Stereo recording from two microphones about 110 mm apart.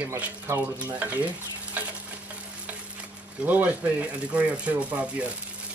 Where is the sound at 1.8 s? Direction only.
15° right (ahead or behind).